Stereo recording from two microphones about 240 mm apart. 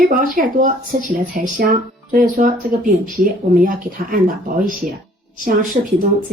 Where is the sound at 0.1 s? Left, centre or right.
Right.